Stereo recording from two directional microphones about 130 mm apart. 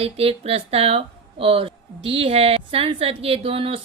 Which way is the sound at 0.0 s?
45° right (ahead or behind).